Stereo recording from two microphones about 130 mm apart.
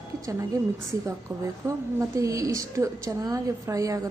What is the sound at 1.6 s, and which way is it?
A woman's voice, 25° right (ahead or behind).